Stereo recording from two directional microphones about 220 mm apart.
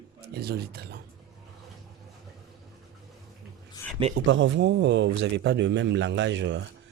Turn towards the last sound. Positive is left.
turn(degrees=-55)  # may be behind; listen again after turning